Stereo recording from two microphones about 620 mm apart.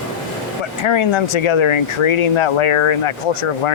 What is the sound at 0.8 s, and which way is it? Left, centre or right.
Speech, left.